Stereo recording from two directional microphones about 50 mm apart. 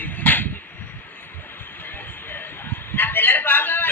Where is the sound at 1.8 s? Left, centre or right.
Left.